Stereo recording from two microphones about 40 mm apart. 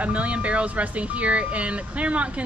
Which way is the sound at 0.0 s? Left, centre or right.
Right.